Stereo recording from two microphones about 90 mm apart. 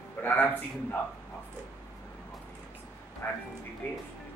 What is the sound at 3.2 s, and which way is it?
Speech, 30° left (ahead or behind).